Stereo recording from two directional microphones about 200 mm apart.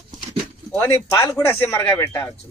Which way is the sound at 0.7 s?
5° left (ahead or behind).